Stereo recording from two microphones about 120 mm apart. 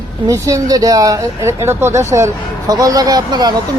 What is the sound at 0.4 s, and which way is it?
Speech, 30° right (ahead or behind).